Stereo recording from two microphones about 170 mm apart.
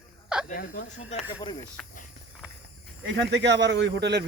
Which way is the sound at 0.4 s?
60° left (ahead or behind).